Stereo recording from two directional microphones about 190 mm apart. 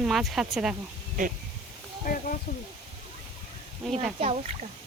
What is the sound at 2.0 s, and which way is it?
Speech, 45° left (ahead or behind).